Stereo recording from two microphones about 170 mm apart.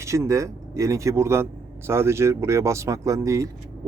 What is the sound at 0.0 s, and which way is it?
Speech, 15° right (ahead or behind).